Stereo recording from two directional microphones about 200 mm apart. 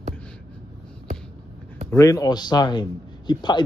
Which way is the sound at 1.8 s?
15° left (ahead or behind).